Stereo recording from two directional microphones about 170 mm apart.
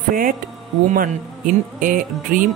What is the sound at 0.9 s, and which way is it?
Speech, 55° right (ahead or behind).